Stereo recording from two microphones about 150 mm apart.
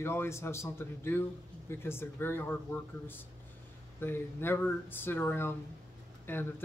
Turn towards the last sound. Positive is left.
turn(degrees=15)  # may be behind; listen again after turning